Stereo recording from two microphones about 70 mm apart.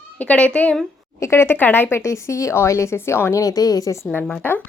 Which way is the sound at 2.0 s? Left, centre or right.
Left.